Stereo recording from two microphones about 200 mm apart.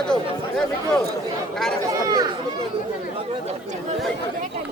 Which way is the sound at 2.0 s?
20° right (ahead or behind).